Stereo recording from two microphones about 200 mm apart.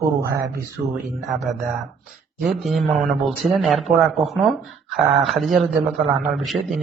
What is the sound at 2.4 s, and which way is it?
Speech, centre (ahead or behind).